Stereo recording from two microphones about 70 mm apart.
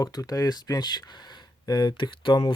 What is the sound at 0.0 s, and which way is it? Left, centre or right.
Speech, left.